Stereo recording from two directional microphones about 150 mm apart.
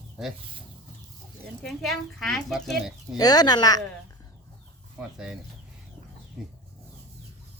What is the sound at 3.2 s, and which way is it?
Speech, 25° left (ahead or behind).